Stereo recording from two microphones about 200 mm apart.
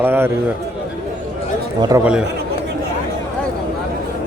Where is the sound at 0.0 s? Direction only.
10° right (ahead or behind).